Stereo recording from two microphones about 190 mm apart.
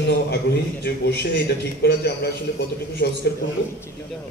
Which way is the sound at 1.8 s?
60° left (ahead or behind).